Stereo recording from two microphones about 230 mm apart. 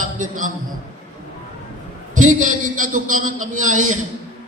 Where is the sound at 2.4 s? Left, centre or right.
Right.